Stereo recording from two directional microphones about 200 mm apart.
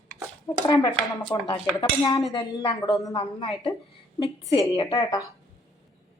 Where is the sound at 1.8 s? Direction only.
20° left (ahead or behind).